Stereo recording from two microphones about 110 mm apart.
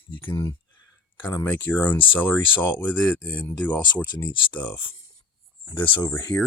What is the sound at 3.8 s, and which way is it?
Speech, 40° left (ahead or behind).